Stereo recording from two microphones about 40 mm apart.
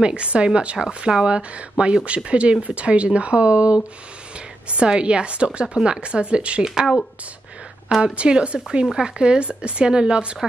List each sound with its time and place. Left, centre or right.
0.0 s a woman's voice: right
6.6 s speech: centre
8.0 s a woman's voice: right